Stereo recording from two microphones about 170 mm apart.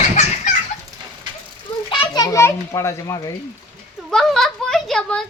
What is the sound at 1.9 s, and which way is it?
A child's voice, 25° left (ahead or behind).